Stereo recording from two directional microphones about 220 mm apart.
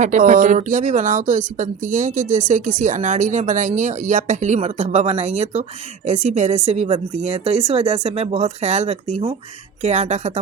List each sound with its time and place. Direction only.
0.0 s a woman's voice: 35° right (ahead or behind)